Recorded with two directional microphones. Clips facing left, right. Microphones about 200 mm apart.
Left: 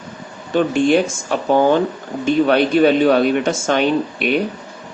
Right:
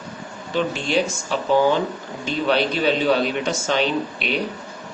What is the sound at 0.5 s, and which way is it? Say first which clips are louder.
Speech: left 7 dB; 55° left (ahead or behind).